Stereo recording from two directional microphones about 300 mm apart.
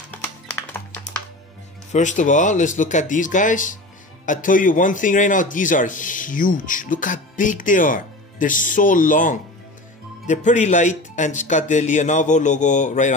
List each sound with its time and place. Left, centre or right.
0.2 s music: centre
1.9 s a man's voice: left